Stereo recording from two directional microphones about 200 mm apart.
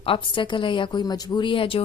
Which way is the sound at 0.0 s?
25° left (ahead or behind).